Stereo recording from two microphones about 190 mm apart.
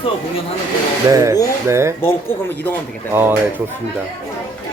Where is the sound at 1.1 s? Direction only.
15° right (ahead or behind).